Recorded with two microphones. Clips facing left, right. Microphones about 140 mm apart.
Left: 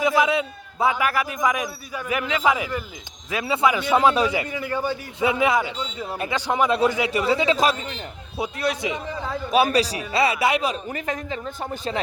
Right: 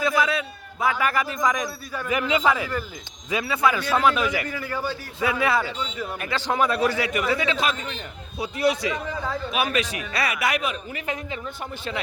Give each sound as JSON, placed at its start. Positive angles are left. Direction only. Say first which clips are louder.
{"t": 0.0, "sound": "a man's voice", "louder": "left 3 dB", "side_deg": 20}
{"t": 0.9, "sound": "speech", "louder": "left 1 dB", "side_deg": 10}
{"t": 2.1, "sound": "a man's voice", "louder": "right 1 dB", "side_deg": 0}
{"t": 2.5, "sound": "speech", "louder": "left 1 dB", "side_deg": 15}
{"t": 6.1, "sound": "a man's voice", "louder": "left 3 dB", "side_deg": 30}
{"t": 8.5, "sound": "a man's voice", "louder": "right 5 dB", "side_deg": -10}
{"t": 9.5, "sound": "a man's voice", "louder": "left 8 dB", "side_deg": 35}